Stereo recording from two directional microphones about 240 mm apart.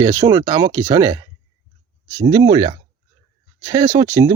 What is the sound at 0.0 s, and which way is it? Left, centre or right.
Speech, centre.